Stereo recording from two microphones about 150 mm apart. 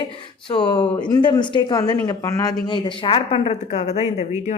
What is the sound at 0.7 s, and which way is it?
Speech, 10° left (ahead or behind).